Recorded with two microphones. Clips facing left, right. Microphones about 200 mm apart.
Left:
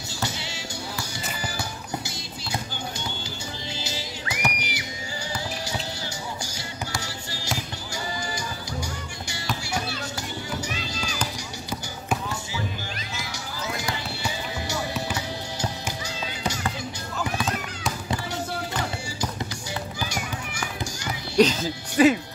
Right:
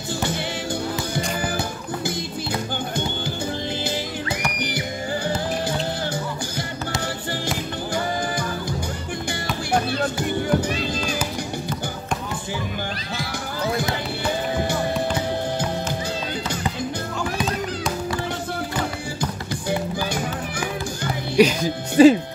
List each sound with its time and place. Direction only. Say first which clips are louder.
4.6 s music: right 8 dB; 55° right (ahead or behind)
9.7 s music: right 9 dB; 55° right (ahead or behind)
14.2 s music: right 10 dB; 55° right (ahead or behind)
21.4 s music: right 3 dB; 10° right (ahead or behind)
22.0 s music: right 6 dB; 30° right (ahead or behind)